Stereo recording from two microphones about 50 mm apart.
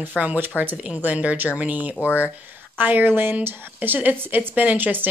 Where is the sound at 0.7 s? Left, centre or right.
Centre.